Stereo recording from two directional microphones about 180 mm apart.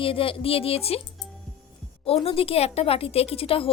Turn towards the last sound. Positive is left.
turn(degrees=30)  # may be behind; listen again after turning